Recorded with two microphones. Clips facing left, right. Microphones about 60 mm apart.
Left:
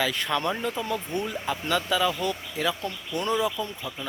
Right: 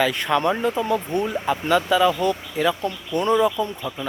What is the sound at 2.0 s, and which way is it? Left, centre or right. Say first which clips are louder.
Speech: right 7 dB; right.